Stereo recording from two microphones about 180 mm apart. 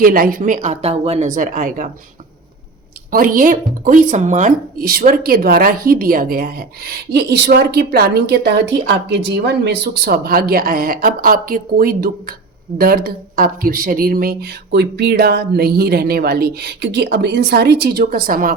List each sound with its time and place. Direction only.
0.0 s speech: 55° right (ahead or behind)
3.1 s speech: 50° right (ahead or behind)
7.1 s speech: 65° right (ahead or behind)